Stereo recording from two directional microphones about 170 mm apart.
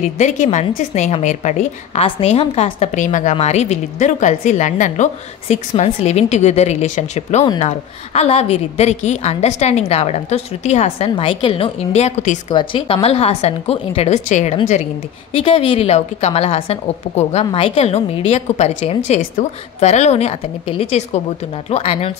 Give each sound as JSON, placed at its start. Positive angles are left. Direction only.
{"t": 0.2, "sound": "a woman's voice", "side_deg": 45}
{"t": 12.4, "sound": "a woman's voice", "side_deg": 30}